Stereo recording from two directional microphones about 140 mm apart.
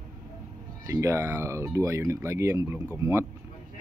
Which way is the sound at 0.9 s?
20° right (ahead or behind).